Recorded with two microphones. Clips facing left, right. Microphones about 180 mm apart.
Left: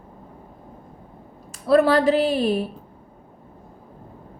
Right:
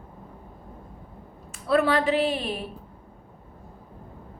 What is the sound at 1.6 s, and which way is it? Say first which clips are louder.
Speech: left 5 dB; 40° left (ahead or behind).